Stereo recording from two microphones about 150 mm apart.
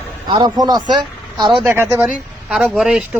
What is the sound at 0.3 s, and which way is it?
Speech, 30° right (ahead or behind).